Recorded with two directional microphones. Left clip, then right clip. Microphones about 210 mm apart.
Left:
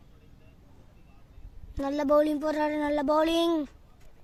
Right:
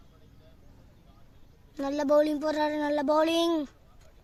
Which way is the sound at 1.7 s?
Centre (ahead or behind).